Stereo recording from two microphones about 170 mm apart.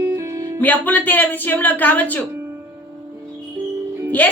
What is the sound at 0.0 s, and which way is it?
Music, 15° right (ahead or behind).